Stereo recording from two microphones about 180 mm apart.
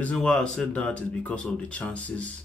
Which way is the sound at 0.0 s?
5° left (ahead or behind).